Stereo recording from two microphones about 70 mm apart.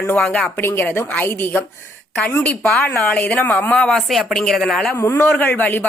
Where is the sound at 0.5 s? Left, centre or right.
Left.